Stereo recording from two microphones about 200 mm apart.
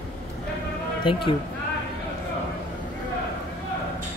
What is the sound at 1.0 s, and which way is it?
Speech, 25° left (ahead or behind).